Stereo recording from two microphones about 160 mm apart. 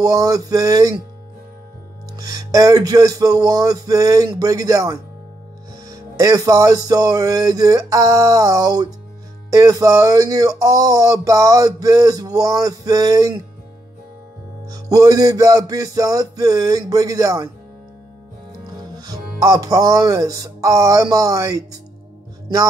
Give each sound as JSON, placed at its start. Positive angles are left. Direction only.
{"t": 0.0, "sound": "speech", "side_deg": -20}
{"t": 2.1, "sound": "speech", "side_deg": -20}
{"t": 14.7, "sound": "speech", "side_deg": -25}
{"t": 18.9, "sound": "speech", "side_deg": -20}